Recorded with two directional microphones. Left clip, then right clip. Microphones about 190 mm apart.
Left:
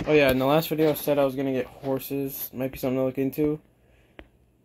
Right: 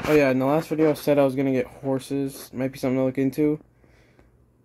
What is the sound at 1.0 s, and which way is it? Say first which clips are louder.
Speech: right 3 dB; 40° right (ahead or behind).